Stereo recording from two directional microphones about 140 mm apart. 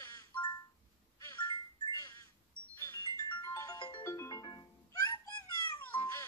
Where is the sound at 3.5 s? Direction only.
25° left (ahead or behind).